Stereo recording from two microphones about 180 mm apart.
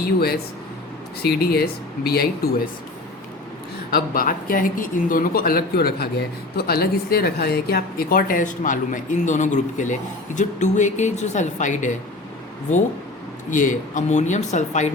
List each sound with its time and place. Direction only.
0.0 s speech: 60° left (ahead or behind)
3.9 s speech: 55° left (ahead or behind)
13.5 s speech: 45° left (ahead or behind)